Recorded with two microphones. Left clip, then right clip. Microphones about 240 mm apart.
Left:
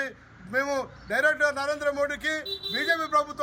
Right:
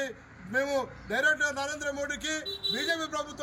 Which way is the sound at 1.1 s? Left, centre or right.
Centre.